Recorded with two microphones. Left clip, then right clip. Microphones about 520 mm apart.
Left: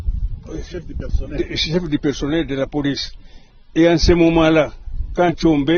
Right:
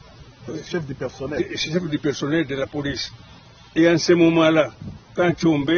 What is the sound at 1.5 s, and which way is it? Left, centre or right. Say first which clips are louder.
A man's voice: left 4 dB; left.